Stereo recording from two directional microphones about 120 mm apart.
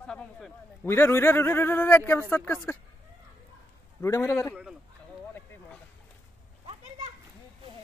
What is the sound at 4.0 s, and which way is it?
Speech, 25° left (ahead or behind).